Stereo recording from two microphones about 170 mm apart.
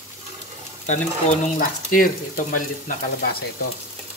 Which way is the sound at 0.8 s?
45° left (ahead or behind).